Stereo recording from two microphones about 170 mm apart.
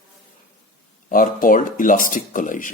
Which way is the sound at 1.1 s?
55° left (ahead or behind).